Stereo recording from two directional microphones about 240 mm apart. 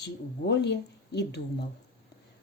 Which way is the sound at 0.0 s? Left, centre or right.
Left.